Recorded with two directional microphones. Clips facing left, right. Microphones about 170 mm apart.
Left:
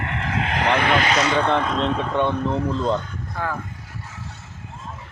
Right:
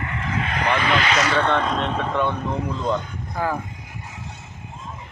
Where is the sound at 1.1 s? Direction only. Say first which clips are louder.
Left 1 dB; 15° left (ahead or behind).